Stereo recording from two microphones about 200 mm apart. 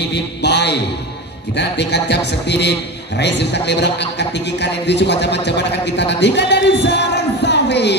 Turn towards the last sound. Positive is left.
turn(degrees=60)  # may be behind; listen again after turning